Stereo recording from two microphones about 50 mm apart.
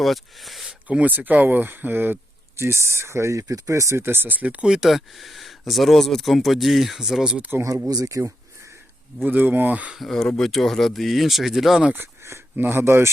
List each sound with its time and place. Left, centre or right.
0.0 s speech: centre
0.9 s speech: right
2.6 s speech: right
4.0 s speech: right
4.6 s speech: centre
8.0 s a sound: right
9.2 s speech: right
10.0 s speech: centre
12.2 s a sound: right
12.5 s speech: right
12.8 s speech: right